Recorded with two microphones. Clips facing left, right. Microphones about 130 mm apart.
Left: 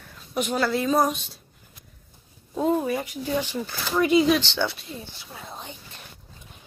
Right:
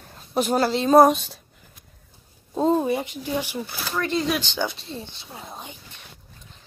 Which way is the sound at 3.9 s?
10° left (ahead or behind).